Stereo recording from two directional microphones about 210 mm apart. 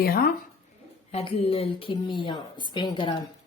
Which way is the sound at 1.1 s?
30° left (ahead or behind).